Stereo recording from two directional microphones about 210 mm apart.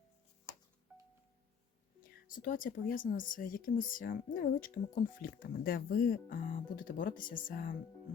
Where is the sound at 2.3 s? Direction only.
40° left (ahead or behind).